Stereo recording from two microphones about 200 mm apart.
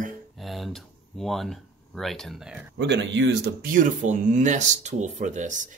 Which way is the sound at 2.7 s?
60° right (ahead or behind).